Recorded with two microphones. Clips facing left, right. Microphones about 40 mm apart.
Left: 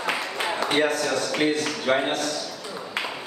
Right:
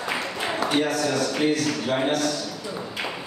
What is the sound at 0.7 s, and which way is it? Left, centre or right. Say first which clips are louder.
Speech: left 2 dB; left.